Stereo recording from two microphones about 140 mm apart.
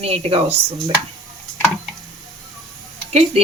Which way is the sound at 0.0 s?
45° right (ahead or behind).